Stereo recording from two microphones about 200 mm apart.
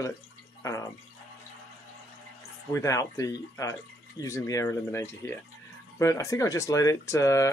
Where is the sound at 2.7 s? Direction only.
15° left (ahead or behind).